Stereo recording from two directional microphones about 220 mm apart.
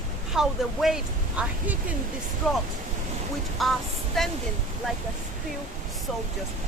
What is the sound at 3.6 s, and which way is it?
Speech, centre (ahead or behind).